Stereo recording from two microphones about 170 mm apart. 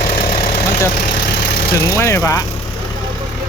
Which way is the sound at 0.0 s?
35° left (ahead or behind).